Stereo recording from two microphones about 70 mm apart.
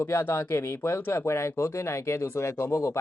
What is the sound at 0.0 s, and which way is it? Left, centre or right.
Speech, left.